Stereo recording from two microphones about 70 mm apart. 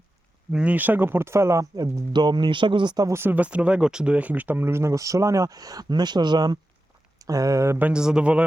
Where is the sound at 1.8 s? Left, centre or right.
Right.